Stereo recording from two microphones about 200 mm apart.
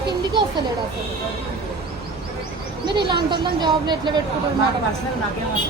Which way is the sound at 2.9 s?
20° right (ahead or behind).